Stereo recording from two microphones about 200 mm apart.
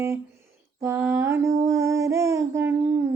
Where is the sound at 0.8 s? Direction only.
10° right (ahead or behind).